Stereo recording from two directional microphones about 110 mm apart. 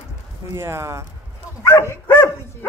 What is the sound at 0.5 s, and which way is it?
Speech, 25° right (ahead or behind).